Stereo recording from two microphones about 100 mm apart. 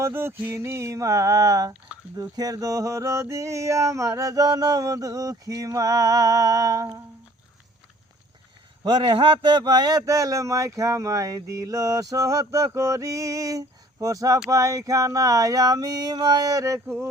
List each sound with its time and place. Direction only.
0.0 s a sound: 25° right (ahead or behind)
2.3 s a man's voice: 40° right (ahead or behind)
8.8 s a man's voice: 55° right (ahead or behind); by 16.8 s 35° right (ahead or behind)